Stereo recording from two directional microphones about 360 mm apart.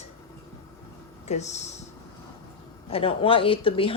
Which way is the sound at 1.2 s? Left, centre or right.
Centre.